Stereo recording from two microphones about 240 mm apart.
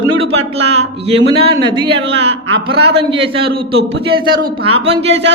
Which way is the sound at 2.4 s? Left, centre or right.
Right.